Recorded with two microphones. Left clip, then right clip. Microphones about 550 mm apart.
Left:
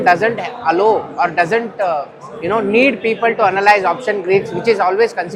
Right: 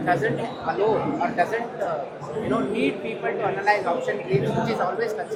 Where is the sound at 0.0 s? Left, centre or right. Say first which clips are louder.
Left 10 dB; left.